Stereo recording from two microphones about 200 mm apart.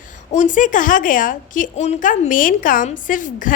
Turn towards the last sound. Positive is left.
turn(degrees=40)  # may be behind; listen again after turning